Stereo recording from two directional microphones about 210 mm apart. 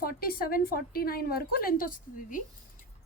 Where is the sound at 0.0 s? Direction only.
45° left (ahead or behind).